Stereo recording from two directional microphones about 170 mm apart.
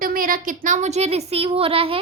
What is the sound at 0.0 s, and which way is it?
A woman's voice, 55° right (ahead or behind).